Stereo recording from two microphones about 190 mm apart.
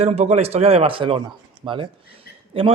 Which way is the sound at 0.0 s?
35° right (ahead or behind).